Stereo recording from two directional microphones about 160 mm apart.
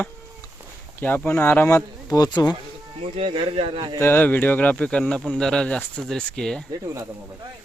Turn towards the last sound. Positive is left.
turn(degrees=5)  # may be behind; listen again after turning